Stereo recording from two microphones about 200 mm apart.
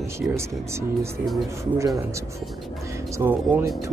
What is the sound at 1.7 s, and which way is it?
Speech, 15° right (ahead or behind).